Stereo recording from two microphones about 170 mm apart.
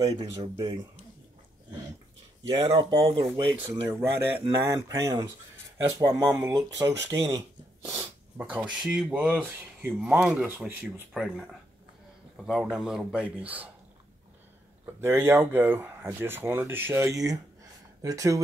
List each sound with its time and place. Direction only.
0.0 s speech: 25° right (ahead or behind)
2.4 s speech: 25° right (ahead or behind)
3.3 s speech: 15° right (ahead or behind)
15.0 s speech: 15° right (ahead or behind)